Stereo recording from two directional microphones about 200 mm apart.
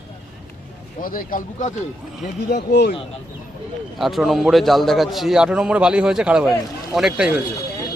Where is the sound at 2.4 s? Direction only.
55° left (ahead or behind).